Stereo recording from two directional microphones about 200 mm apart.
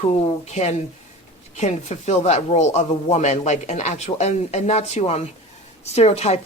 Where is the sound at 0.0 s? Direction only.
30° left (ahead or behind).